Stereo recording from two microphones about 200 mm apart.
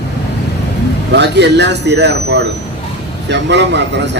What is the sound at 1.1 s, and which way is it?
Speech, 60° right (ahead or behind).